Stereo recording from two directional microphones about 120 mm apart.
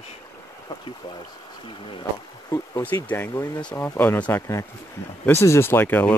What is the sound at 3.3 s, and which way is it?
Speech, 30° left (ahead or behind).